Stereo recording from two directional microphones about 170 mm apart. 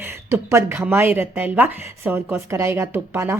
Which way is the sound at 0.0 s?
15° right (ahead or behind).